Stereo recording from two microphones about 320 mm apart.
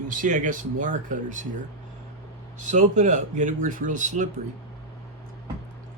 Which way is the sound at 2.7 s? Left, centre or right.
Right.